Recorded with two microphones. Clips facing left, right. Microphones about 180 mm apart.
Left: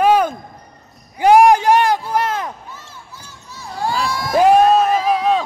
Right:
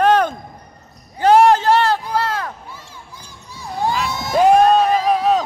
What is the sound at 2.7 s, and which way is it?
Basketball bounce, 10° right (ahead or behind).